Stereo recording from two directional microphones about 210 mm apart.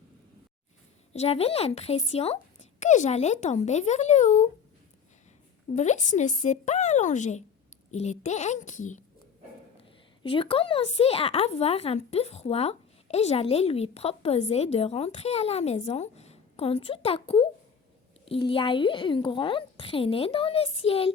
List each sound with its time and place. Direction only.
1.1 s speech: 30° left (ahead or behind)
5.7 s speech: 35° left (ahead or behind)
10.2 s a woman's voice: 25° left (ahead or behind)